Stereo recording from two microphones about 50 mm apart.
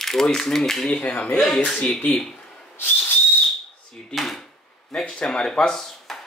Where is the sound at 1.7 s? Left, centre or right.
Centre.